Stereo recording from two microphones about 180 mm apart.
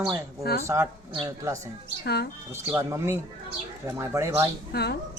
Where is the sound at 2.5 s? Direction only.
15° right (ahead or behind).